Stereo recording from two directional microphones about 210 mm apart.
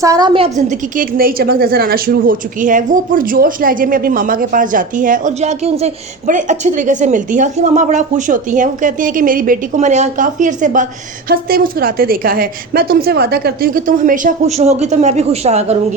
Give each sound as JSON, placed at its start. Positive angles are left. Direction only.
{"t": 0.0, "sound": "a woman's voice", "side_deg": -15}